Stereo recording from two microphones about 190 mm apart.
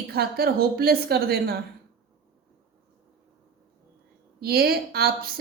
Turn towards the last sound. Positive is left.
turn(degrees=-55)  # may be behind; listen again after turning